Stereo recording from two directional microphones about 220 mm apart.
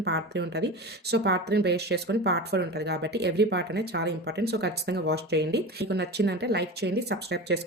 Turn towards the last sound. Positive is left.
turn(degrees=-50)  # may be behind; listen again after turning